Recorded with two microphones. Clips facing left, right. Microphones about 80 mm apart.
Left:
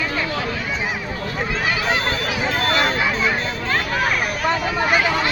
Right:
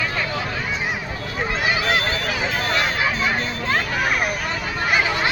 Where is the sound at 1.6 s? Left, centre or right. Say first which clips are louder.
Even; centre.